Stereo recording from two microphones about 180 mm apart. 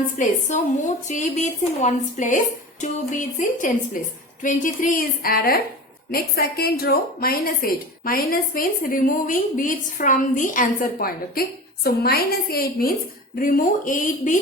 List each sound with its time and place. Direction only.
0.2 s a woman's voice: 45° left (ahead or behind)